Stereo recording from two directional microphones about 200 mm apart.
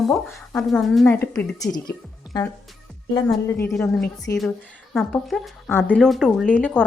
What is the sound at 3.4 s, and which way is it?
Speech, 10° left (ahead or behind).